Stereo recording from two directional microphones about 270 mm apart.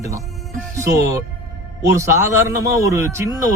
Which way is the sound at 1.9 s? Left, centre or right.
Centre.